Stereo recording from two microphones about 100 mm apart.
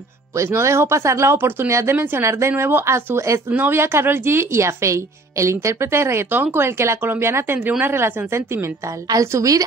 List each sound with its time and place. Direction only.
0.4 s a woman's voice: 25° right (ahead or behind)